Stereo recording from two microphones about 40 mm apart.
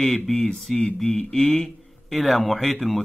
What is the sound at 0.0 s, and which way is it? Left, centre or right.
A man's voice, centre.